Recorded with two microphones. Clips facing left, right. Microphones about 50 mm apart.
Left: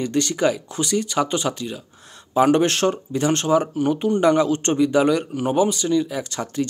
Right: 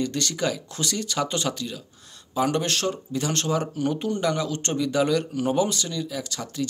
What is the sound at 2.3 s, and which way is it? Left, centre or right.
Speech, left.